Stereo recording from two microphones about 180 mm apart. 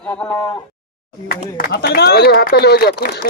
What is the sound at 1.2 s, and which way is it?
Speech, 60° left (ahead or behind).